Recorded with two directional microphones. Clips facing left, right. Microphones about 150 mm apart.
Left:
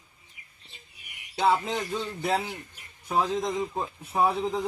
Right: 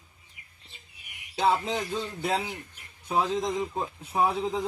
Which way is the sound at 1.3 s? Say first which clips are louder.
Left 1 dB; centre (ahead or behind).